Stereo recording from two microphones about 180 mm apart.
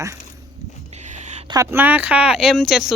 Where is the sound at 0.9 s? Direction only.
40° right (ahead or behind).